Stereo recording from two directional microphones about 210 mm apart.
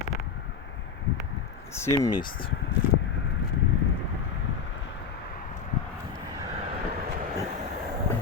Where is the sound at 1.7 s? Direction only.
10° left (ahead or behind).